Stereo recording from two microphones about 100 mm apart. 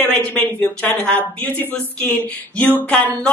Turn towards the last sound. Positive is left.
turn(degrees=15)  # may be behind; listen again after turning